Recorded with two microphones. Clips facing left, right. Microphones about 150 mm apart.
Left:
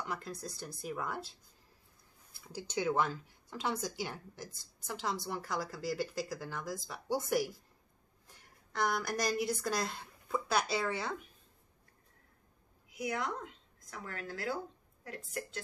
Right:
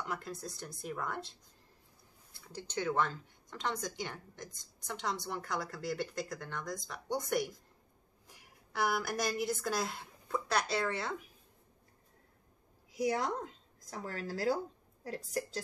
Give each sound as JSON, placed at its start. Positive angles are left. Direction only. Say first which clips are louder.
{"t": 0.0, "sound": "speech", "louder": "even", "side_deg": 0}
{"t": 2.4, "sound": "speech", "louder": "left 2 dB", "side_deg": 10}
{"t": 8.3, "sound": "a woman's voice", "louder": "right 1 dB", "side_deg": -10}
{"t": 12.9, "sound": "a woman's voice", "louder": "right 4 dB", "side_deg": -35}